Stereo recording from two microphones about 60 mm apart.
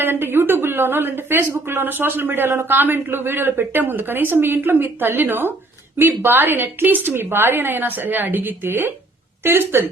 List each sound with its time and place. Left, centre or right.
0.0 s a woman's voice: right